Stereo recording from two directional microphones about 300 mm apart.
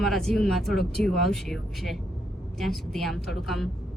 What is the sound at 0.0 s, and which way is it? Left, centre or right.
A woman's voice, centre.